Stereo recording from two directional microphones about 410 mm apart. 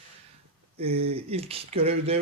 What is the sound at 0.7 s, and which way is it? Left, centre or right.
Speech, centre.